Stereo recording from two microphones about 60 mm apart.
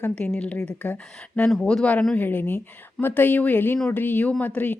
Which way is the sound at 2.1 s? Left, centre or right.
Left.